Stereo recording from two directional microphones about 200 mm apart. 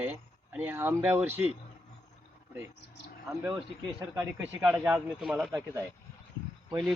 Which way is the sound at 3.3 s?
5° right (ahead or behind).